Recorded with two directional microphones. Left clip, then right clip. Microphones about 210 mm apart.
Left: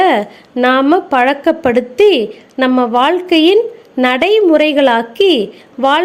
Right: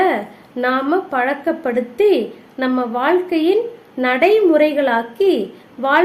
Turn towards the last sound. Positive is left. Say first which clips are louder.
# left 3 dB
turn(degrees=40)  # may be behind; listen again after turning